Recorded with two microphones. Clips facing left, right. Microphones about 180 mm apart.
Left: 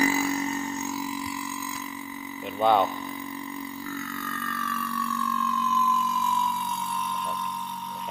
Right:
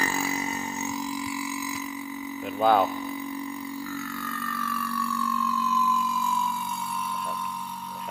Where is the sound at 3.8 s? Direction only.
5° right (ahead or behind).